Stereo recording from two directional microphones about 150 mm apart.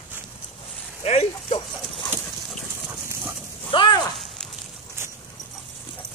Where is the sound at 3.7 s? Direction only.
35° left (ahead or behind).